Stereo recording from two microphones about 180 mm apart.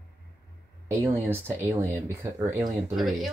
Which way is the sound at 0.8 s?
15° right (ahead or behind).